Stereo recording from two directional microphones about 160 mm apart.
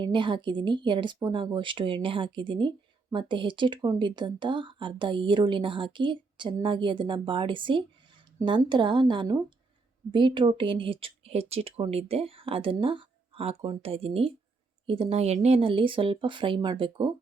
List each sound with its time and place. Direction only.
0.0 s speech: 30° right (ahead or behind)